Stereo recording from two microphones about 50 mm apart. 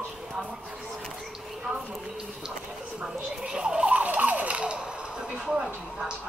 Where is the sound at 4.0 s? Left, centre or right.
Right.